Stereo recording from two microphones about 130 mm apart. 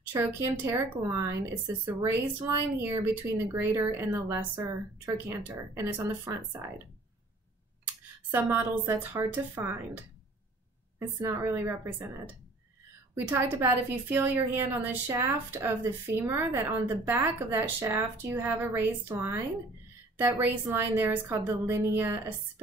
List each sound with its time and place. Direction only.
0.1 s speech: 20° right (ahead or behind)
8.3 s a woman's voice: 15° right (ahead or behind)
13.1 s a woman's voice: 15° right (ahead or behind)